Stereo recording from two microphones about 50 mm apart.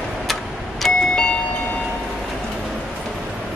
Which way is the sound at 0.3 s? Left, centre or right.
Centre.